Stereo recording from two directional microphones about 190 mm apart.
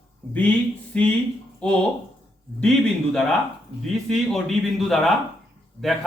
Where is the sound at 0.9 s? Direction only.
5° left (ahead or behind).